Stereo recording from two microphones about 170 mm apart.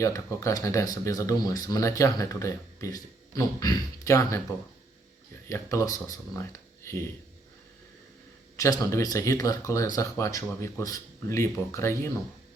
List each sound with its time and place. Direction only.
0.0 s speech: 20° left (ahead or behind)
5.5 s speech: 15° left (ahead or behind)
8.5 s speech: 20° left (ahead or behind)